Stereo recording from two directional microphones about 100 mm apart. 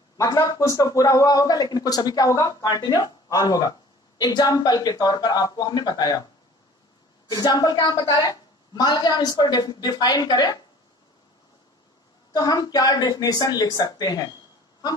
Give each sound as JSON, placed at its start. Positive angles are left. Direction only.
{"t": 0.2, "sound": "speech", "side_deg": 35}
{"t": 7.2, "sound": "a woman's voice", "side_deg": 40}
{"t": 12.3, "sound": "speech", "side_deg": 40}